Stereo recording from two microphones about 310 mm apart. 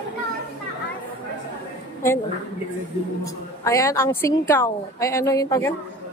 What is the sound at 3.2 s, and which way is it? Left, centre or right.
A woman's voice, centre.